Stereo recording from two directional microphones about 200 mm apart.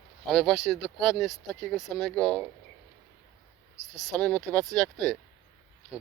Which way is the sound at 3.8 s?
35° left (ahead or behind).